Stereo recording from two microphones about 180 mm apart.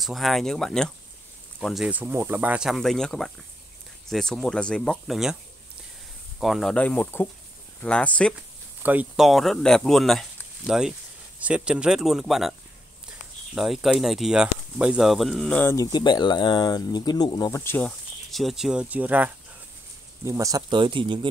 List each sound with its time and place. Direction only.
0.0 s speech: centre (ahead or behind)
6.4 s speech: centre (ahead or behind)
8.8 s speech: 5° right (ahead or behind)
13.6 s speech: 5° right (ahead or behind)
15.7 s speech: 20° left (ahead or behind)
17.6 s speech: 10° left (ahead or behind); by 21.3 s 25° right (ahead or behind)